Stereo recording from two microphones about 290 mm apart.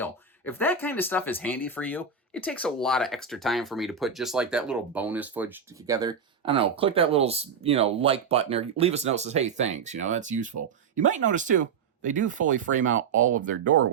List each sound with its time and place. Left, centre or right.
0.0 s speech: centre; by 13.2 s right